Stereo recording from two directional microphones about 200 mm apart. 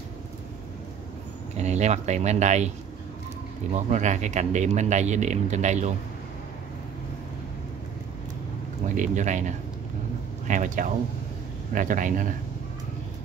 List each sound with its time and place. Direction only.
1.6 s speech: 35° right (ahead or behind)
3.7 s speech: 35° right (ahead or behind)
8.8 s speech: 40° right (ahead or behind)